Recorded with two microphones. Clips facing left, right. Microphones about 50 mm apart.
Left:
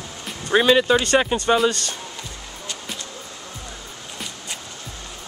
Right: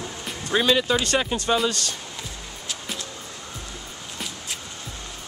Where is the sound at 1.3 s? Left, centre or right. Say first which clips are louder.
Left 4 dB; centre.